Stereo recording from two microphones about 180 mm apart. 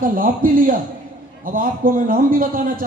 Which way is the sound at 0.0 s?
50° right (ahead or behind).